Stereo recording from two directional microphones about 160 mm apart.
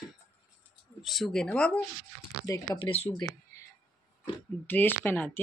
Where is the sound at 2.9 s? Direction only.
40° left (ahead or behind).